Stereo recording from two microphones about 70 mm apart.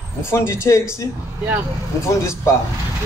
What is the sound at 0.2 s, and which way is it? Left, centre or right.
Speech, left.